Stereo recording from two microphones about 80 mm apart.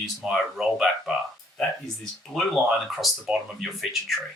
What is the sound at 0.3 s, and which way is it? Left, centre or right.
Speech, centre.